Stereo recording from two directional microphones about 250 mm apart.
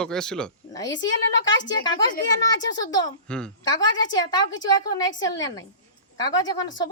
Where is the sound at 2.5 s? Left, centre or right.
Centre.